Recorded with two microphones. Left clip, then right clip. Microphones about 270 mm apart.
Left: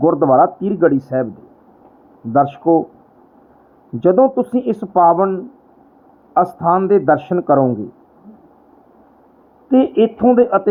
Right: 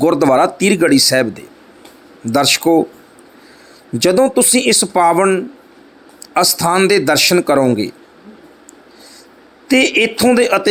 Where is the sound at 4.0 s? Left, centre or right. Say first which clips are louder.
Even; right.